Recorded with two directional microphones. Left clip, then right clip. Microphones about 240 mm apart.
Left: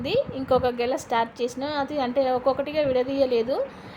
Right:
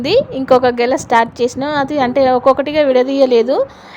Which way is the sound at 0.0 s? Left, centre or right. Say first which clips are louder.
Right 11 dB; right.